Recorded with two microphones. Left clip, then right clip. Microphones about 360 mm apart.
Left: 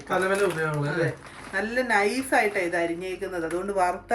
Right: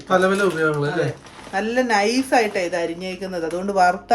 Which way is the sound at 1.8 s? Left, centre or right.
Centre.